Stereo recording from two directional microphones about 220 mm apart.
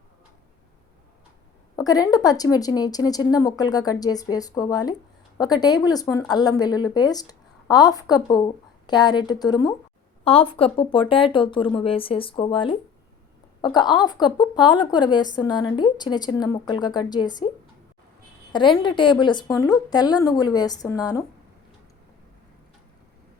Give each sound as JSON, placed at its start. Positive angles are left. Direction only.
{"t": 1.7, "sound": "a woman's voice", "side_deg": 15}
{"t": 18.5, "sound": "speech", "side_deg": 20}